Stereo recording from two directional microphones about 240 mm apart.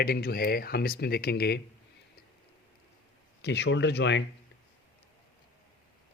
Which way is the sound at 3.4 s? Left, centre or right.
Left.